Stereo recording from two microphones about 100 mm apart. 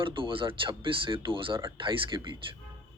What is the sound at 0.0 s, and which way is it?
Speech, 60° right (ahead or behind).